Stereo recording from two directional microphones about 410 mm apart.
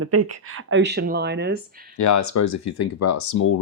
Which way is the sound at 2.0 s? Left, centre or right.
Left.